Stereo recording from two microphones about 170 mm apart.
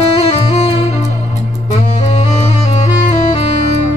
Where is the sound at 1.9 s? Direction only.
40° left (ahead or behind).